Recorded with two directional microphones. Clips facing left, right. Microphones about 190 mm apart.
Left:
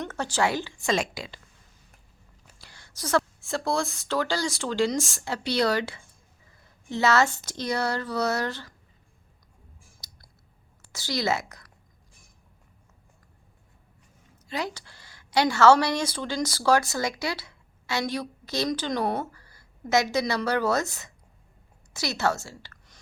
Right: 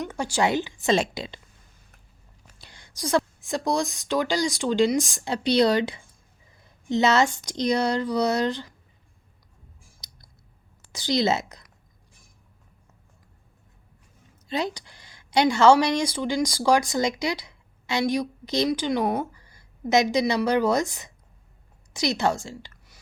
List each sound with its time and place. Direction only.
0.0 s a woman's voice: 10° right (ahead or behind)
2.6 s a woman's voice: 20° right (ahead or behind)
10.0 s clicking: 20° right (ahead or behind)
10.8 s a woman's voice: 20° right (ahead or behind)
14.4 s a woman's voice: 20° right (ahead or behind)